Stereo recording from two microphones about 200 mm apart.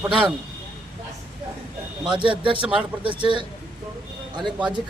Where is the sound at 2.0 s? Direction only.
25° right (ahead or behind).